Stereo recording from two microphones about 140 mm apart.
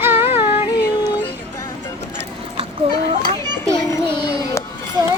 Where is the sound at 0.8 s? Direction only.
30° left (ahead or behind).